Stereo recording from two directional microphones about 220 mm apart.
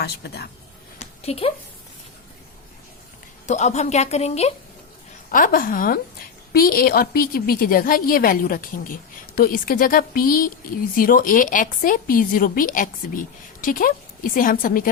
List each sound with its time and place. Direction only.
0.0 s speech: 45° left (ahead or behind)
0.9 s a sound: 30° left (ahead or behind)
3.4 s a woman's voice: 30° left (ahead or behind)